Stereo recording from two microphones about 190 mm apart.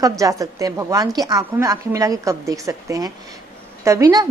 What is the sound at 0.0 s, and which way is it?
A woman's voice, 15° right (ahead or behind).